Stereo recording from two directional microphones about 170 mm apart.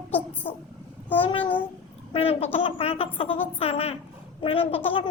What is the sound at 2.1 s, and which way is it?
Speech, 35° left (ahead or behind).